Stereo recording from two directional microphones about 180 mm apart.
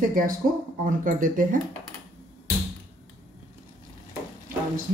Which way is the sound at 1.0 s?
50° right (ahead or behind).